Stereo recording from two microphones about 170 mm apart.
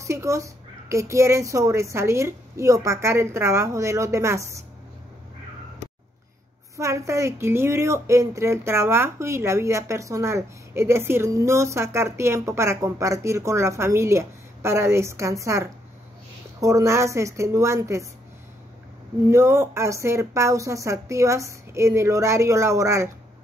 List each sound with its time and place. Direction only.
0.0 s speech: 15° right (ahead or behind)
6.8 s speech: 15° right (ahead or behind)
19.2 s speech: 15° right (ahead or behind)